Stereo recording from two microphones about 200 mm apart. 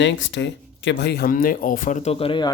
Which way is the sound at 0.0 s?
65° left (ahead or behind).